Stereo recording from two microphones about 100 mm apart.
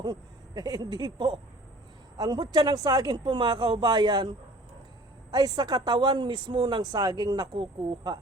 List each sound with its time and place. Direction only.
0.0 s speech: 45° right (ahead or behind)